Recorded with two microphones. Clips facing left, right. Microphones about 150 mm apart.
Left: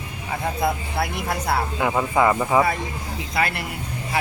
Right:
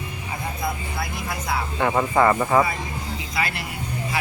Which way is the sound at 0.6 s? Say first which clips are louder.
Left 5 dB; 70° left (ahead or behind).